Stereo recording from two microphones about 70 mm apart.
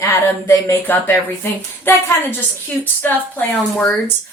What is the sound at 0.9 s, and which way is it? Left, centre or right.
A woman's voice, left.